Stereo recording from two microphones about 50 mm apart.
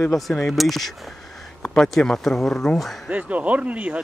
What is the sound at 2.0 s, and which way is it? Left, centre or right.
Speech, centre.